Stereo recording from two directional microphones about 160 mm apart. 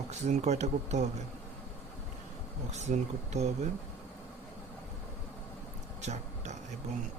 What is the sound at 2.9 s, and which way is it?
Speech, 45° right (ahead or behind).